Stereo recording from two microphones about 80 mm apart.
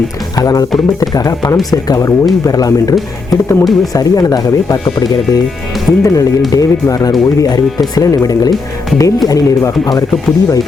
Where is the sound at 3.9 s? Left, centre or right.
Left.